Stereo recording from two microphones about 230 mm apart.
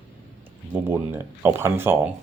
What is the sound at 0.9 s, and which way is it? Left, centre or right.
Speech, centre.